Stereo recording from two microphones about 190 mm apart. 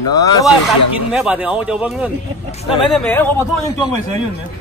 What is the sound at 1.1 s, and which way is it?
Speech, 5° right (ahead or behind).